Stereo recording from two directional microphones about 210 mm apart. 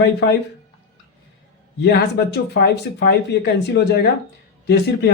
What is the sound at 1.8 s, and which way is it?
Speech, 50° left (ahead or behind).